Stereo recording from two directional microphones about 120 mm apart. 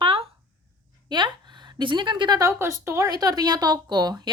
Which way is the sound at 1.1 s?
40° right (ahead or behind).